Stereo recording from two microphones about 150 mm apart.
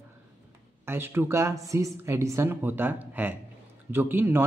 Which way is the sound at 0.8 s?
15° right (ahead or behind).